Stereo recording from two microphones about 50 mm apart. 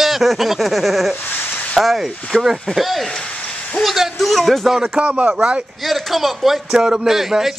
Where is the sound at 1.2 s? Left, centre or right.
Left.